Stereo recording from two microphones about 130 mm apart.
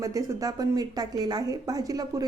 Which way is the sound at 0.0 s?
25° right (ahead or behind).